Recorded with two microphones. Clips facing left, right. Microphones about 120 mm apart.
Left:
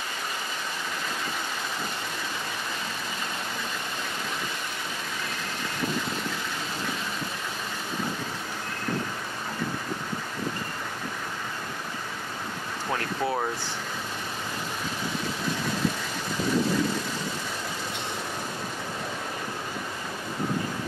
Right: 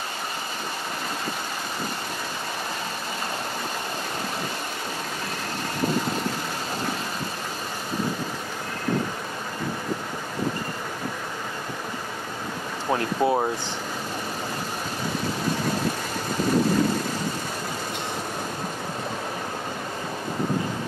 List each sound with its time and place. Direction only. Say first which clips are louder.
12.9 s speech: right 6 dB; 25° right (ahead or behind)